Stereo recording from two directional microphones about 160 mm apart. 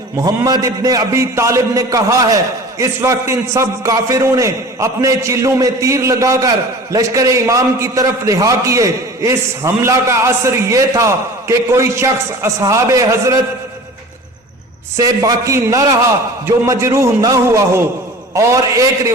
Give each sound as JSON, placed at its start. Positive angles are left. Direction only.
{"t": 0.2, "sound": "a man's voice", "side_deg": -25}
{"t": 14.9, "sound": "a man's voice", "side_deg": -20}